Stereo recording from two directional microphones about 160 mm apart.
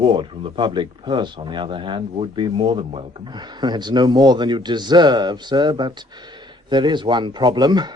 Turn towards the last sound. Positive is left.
turn(degrees=-25)  # may be behind; listen again after turning